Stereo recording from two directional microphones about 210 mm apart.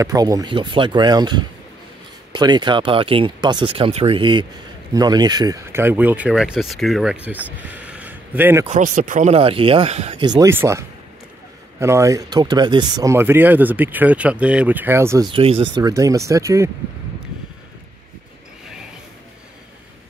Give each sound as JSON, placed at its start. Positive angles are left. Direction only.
{"t": 0.0, "sound": "speech", "side_deg": -15}
{"t": 8.6, "sound": "speech", "side_deg": -35}
{"t": 15.3, "sound": "speech", "side_deg": -25}
{"t": 15.7, "sound": "speech", "side_deg": -15}